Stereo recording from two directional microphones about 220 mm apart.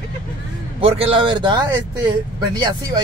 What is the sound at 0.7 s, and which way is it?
Speech, 25° right (ahead or behind).